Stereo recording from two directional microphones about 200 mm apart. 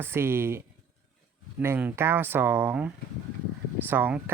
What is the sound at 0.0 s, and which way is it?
Speech, 10° right (ahead or behind).